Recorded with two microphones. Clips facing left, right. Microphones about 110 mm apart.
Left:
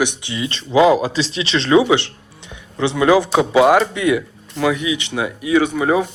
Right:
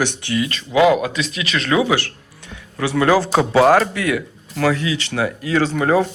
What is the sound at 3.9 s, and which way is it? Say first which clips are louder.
Speech: left 3 dB; 20° left (ahead or behind).